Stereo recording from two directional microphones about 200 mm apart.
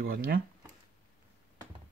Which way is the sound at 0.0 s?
45° right (ahead or behind).